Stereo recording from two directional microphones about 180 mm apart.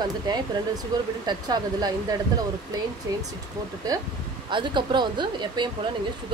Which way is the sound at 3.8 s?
20° right (ahead or behind).